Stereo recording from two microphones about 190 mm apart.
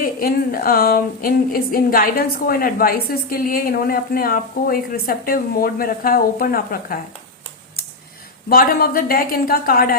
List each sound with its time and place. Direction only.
0.0 s speech: 50° left (ahead or behind)
8.4 s speech: 50° left (ahead or behind)